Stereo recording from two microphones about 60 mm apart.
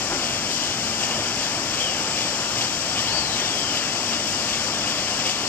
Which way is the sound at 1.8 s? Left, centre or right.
Left.